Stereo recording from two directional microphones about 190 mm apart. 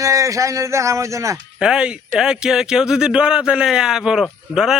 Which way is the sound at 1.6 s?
5° right (ahead or behind).